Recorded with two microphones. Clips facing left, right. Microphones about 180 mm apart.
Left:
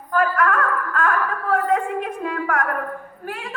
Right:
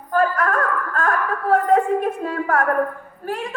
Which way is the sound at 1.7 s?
40° right (ahead or behind).